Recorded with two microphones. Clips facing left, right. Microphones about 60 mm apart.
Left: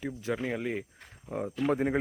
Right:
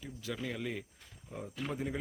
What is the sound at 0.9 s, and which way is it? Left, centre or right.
Cricket, left.